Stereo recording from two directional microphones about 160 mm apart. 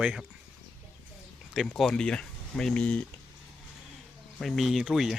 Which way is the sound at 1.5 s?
Centre (ahead or behind).